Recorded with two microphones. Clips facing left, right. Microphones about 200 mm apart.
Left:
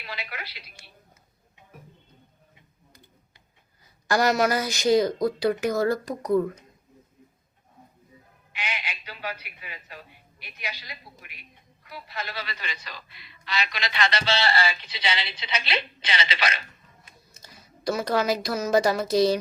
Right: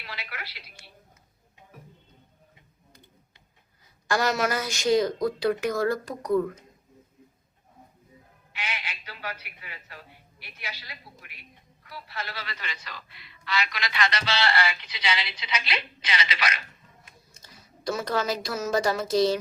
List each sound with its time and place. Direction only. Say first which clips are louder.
0.0 s speech: left 3 dB; 15° left (ahead or behind)
4.0 s speech: left 3 dB; centre (ahead or behind)
8.5 s a man's voice: left 2 dB; 15° left (ahead or behind)
17.8 s speech: left 3 dB; centre (ahead or behind)